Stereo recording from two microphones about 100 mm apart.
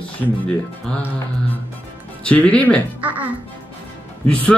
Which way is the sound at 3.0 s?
15° right (ahead or behind).